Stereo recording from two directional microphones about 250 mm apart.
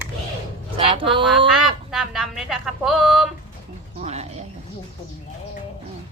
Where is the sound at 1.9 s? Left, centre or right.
Centre.